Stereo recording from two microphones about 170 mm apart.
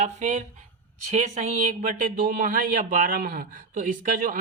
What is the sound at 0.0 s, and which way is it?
Speech, 45° right (ahead or behind).